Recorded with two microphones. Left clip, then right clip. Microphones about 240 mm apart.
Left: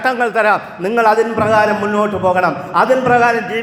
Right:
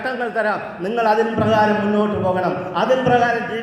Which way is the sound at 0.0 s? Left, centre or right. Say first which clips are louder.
Left 7 dB; left.